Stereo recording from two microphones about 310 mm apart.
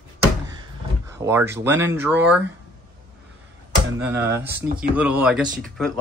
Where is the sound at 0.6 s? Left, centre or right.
Centre.